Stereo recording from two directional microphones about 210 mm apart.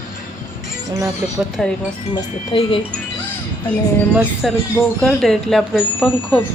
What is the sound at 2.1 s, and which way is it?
Speech, 25° left (ahead or behind).